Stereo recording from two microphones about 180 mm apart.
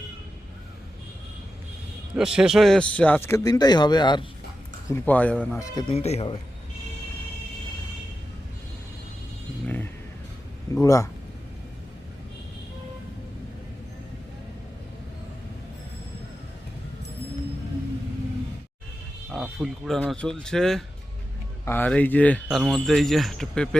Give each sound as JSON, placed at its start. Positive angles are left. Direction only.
{"t": 2.1, "sound": "speech", "side_deg": -5}
{"t": 4.9, "sound": "speech", "side_deg": 10}
{"t": 5.9, "sound": "speech", "side_deg": 35}
{"t": 10.8, "sound": "speech", "side_deg": 15}
{"t": 19.3, "sound": "speech", "side_deg": 0}
{"t": 22.4, "sound": "speech", "side_deg": 0}